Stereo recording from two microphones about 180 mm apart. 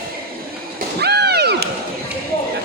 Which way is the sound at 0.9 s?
65° right (ahead or behind).